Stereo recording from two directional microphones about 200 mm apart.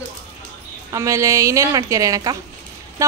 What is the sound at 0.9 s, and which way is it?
A woman's voice, 15° right (ahead or behind).